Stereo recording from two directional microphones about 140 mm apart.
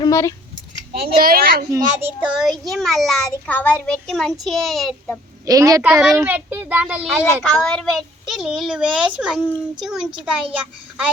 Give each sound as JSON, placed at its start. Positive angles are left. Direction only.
{"t": 0.0, "sound": "speech", "side_deg": 25}
{"t": 1.2, "sound": "speech", "side_deg": -90}
{"t": 1.7, "sound": "a child's voice", "side_deg": -20}
{"t": 2.3, "sound": "a child's voice", "side_deg": 0}
{"t": 5.5, "sound": "a child's voice", "side_deg": -25}
{"t": 5.8, "sound": "a child's voice", "side_deg": -5}
{"t": 7.5, "sound": "a child's voice", "side_deg": 5}